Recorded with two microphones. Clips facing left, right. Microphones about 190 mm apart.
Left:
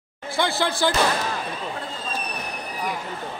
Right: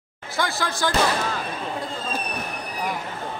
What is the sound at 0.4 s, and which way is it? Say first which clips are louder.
Speech: left 2 dB; 25° left (ahead or behind).